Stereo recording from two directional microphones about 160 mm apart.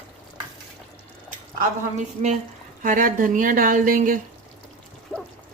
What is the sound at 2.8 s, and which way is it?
Speech, 55° right (ahead or behind).